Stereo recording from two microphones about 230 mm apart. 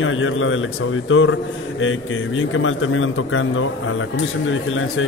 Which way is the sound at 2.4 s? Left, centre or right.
Left.